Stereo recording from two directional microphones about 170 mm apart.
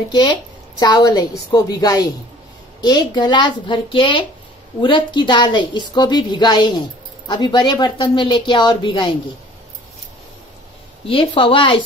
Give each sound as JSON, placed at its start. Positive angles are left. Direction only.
{"t": 0.1, "sound": "a woman's voice", "side_deg": 25}
{"t": 11.1, "sound": "a woman's voice", "side_deg": 30}